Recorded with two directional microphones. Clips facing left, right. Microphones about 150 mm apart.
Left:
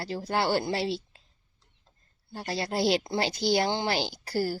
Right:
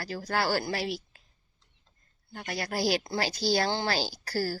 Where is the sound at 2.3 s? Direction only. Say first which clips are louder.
Left 3 dB; 30° left (ahead or behind).